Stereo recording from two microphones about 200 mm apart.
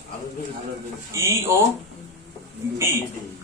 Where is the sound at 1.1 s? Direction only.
15° right (ahead or behind).